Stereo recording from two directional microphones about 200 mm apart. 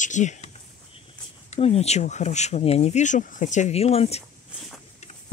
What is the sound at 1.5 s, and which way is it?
Speech, 30° left (ahead or behind).